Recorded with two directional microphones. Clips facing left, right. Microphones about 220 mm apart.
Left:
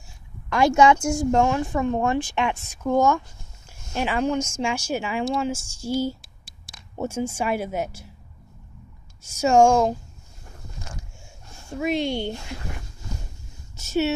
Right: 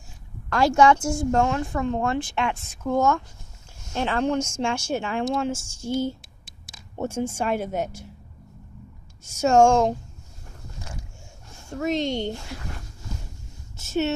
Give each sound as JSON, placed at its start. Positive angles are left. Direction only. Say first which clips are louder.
{"t": 0.5, "sound": "speech", "louder": "left 1 dB", "side_deg": 15}
{"t": 9.2, "sound": "speech", "louder": "even", "side_deg": 10}
{"t": 11.8, "sound": "speech", "louder": "even", "side_deg": 10}